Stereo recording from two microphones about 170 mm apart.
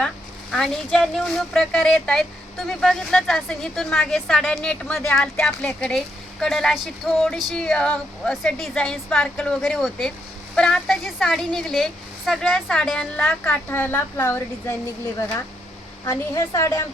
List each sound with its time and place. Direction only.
0.5 s speech: 5° left (ahead or behind)
16.0 s a woman's voice: 15° left (ahead or behind)